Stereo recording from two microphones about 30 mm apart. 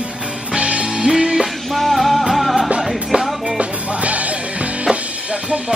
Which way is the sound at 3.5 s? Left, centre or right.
Right.